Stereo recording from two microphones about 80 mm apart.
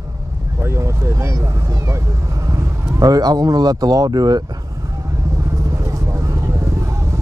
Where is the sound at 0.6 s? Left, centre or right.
Right.